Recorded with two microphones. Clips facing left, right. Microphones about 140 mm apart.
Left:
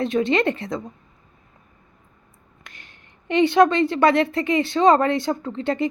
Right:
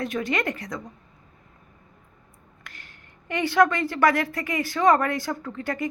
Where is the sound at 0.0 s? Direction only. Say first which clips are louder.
Left 7 dB; 25° left (ahead or behind).